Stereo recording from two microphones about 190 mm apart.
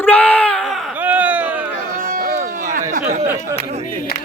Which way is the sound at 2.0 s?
50° right (ahead or behind).